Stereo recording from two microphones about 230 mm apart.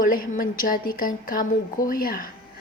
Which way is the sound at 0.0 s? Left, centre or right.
Left.